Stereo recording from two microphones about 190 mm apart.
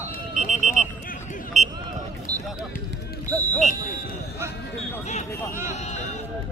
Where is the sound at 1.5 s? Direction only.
40° right (ahead or behind).